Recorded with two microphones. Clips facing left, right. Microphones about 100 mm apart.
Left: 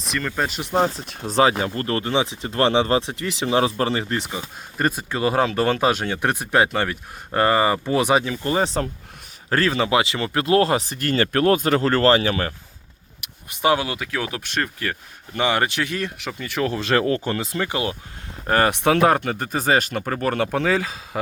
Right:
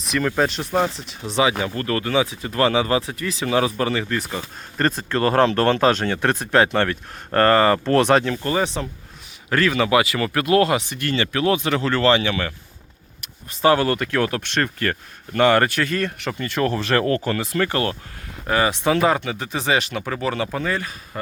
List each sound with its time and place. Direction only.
0.0 s speech: 5° right (ahead or behind)
0.6 s speech: 25° left (ahead or behind)
0.9 s speech: 45° left (ahead or behind); by 4.3 s 25° left (ahead or behind)
4.3 s speech: 10° left (ahead or behind)
8.4 s speech: 35° left (ahead or behind)
13.2 s speech: 15° left (ahead or behind)
18.4 s speech: 50° left (ahead or behind)
20.2 s speech: 60° left (ahead or behind); by 21.2 s 90° left